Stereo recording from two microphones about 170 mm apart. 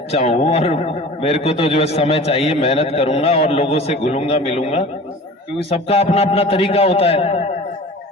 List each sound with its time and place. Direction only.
0.1 s a man's voice: 40° left (ahead or behind)